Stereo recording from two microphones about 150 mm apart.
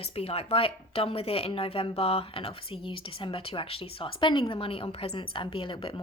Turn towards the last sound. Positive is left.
turn(degrees=35)  # may be behind; listen again after turning